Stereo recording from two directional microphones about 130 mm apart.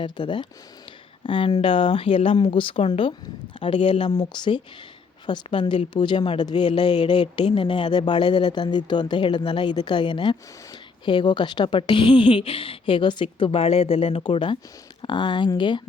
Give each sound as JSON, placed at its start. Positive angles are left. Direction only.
{"t": 0.0, "sound": "speech", "side_deg": 40}
{"t": 13.4, "sound": "speech", "side_deg": 45}